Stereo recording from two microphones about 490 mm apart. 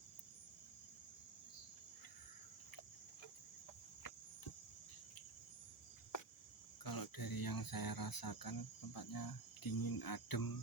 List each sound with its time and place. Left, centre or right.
6.8 s speech: left